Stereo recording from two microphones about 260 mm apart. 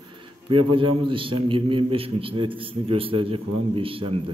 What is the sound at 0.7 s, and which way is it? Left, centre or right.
A man's voice, centre.